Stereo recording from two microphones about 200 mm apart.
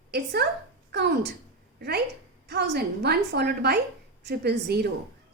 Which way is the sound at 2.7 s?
55° right (ahead or behind).